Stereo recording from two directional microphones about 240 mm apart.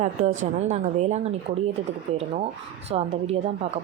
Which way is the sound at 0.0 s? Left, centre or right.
Right.